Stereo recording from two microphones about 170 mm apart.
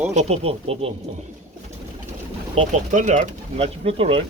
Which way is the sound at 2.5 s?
45° right (ahead or behind).